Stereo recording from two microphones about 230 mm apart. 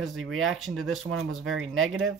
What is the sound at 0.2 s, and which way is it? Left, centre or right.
Speech, right.